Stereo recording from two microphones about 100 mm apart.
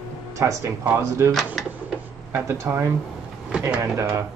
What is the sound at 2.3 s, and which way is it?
Speech, 20° right (ahead or behind).